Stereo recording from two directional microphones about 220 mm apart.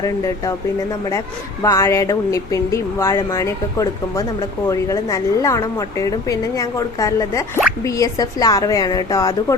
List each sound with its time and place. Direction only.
0.0 s speech: 15° left (ahead or behind)
1.6 s speech: 15° left (ahead or behind)